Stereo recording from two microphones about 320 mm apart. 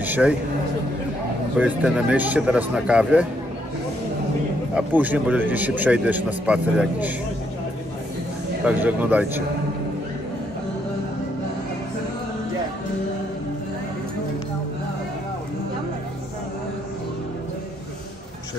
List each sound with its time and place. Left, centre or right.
0.0 s a sound: centre
1.6 s speech: centre
4.7 s speech: centre
8.6 s speech: centre